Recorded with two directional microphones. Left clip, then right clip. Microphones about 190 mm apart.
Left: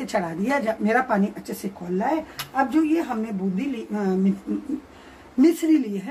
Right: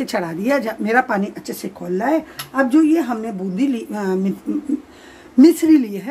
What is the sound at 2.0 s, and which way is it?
Speech, 55° right (ahead or behind).